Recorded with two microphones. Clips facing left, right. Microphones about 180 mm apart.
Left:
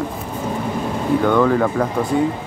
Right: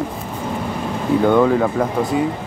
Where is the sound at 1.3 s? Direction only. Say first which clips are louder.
Right 2 dB; 15° right (ahead or behind).